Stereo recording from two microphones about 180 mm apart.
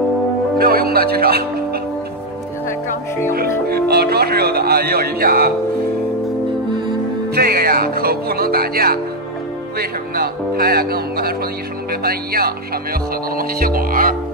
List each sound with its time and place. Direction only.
0.6 s speech: 60° right (ahead or behind)
3.6 s speech: 60° right (ahead or behind)
7.3 s speech: 55° right (ahead or behind)